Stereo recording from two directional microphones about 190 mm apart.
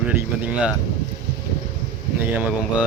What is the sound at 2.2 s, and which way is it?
Speech, 10° right (ahead or behind).